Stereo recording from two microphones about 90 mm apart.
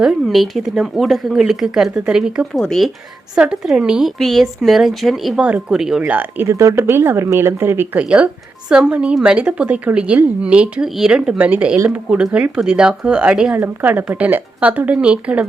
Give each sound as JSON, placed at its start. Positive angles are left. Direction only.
{"t": 0.0, "sound": "speech", "side_deg": -5}
{"t": 2.6, "sound": "speech", "side_deg": 5}
{"t": 3.3, "sound": "speech", "side_deg": -10}
{"t": 5.4, "sound": "a woman's voice", "side_deg": -10}
{"t": 6.1, "sound": "speech", "side_deg": -20}
{"t": 6.5, "sound": "speech", "side_deg": -35}
{"t": 7.9, "sound": "a woman's voice", "side_deg": -15}